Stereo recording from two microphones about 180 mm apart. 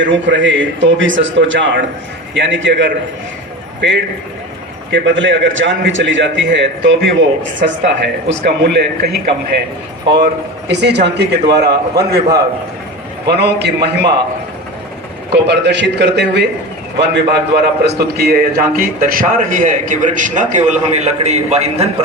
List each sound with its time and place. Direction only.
0.0 s a man's voice: 90° right
3.8 s a man's voice: 75° right (ahead or behind)
4.9 s a man's voice: 90° right; by 9.1 s 65° right (ahead or behind)
10.7 s a man's voice: 70° right (ahead or behind)
15.3 s a man's voice: 70° right (ahead or behind); by 21.8 s 35° right (ahead or behind)